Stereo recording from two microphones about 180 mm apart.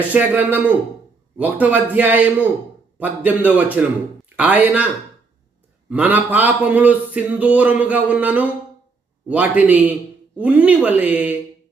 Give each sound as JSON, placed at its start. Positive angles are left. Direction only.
{"t": 0.1, "sound": "a man's voice", "side_deg": -10}
{"t": 5.9, "sound": "a man's voice", "side_deg": -10}